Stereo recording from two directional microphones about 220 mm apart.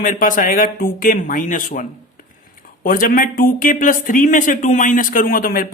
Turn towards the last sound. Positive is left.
turn(degrees=40)  # may be behind; listen again after turning